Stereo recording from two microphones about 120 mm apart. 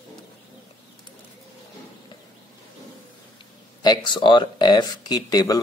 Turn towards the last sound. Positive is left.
turn(degrees=30)  # may be behind; listen again after turning